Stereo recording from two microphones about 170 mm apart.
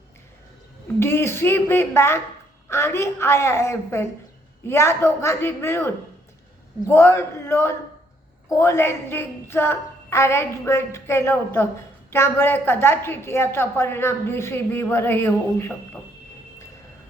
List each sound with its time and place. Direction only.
0.9 s a woman's voice: 15° left (ahead or behind)